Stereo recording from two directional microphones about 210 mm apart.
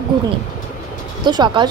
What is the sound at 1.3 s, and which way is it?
Speech, 20° right (ahead or behind).